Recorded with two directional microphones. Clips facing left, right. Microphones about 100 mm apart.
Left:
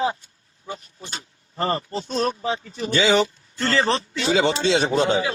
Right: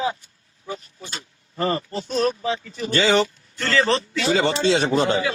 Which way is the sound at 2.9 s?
5° left (ahead or behind).